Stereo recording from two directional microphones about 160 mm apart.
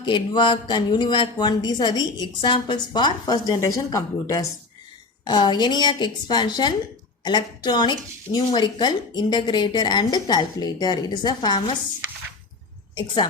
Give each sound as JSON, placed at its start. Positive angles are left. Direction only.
{"t": 0.0, "sound": "speech", "side_deg": 30}